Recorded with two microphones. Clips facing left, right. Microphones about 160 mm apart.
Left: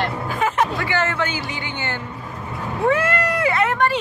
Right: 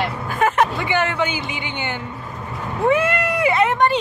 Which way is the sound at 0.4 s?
55° right (ahead or behind).